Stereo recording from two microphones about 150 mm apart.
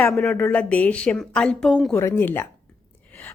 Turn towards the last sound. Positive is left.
turn(degrees=10)  # may be behind; listen again after turning